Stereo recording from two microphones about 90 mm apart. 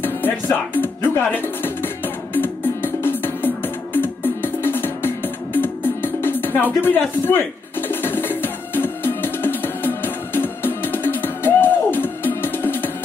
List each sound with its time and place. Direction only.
0.0 s music: 20° left (ahead or behind)
6.2 s speech: 25° left (ahead or behind)
7.9 s music: 25° left (ahead or behind)